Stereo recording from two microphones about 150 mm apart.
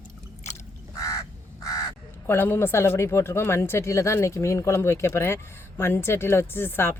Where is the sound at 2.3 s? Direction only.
15° left (ahead or behind).